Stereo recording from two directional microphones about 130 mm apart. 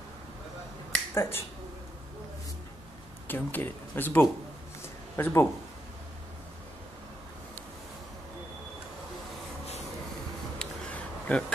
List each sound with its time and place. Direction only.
1.1 s speech: 20° left (ahead or behind)
3.3 s speech: 15° left (ahead or behind)
10.6 s a sound: 10° left (ahead or behind)